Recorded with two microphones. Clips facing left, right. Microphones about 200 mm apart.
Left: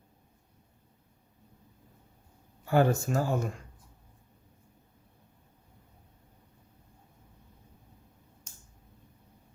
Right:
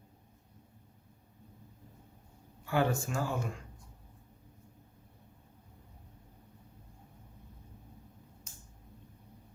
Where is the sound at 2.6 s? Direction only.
40° left (ahead or behind).